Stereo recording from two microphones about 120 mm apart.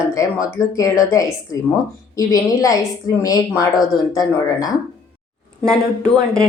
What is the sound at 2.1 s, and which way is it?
A woman's voice, 30° left (ahead or behind).